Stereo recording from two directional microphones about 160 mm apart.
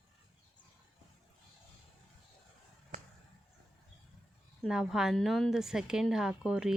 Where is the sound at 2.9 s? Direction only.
55° right (ahead or behind).